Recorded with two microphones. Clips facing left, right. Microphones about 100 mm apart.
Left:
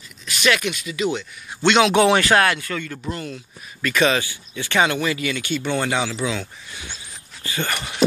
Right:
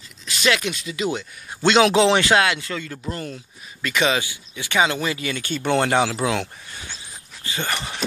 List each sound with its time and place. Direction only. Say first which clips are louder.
0.2 s speech: left 1 dB; 25° right (ahead or behind)
2.1 s speech: left 1 dB; 20° right (ahead or behind)
3.1 s speech: even; 35° right (ahead or behind)
3.8 s speech: left 2 dB; 20° right (ahead or behind)
4.9 s speech: left 2 dB; 25° right (ahead or behind)
5.7 s speech: right 5 dB; 50° right (ahead or behind)
7.4 s speech: left 1 dB; 25° right (ahead or behind)